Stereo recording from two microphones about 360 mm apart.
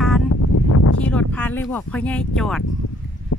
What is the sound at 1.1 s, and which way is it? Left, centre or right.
Speech, centre.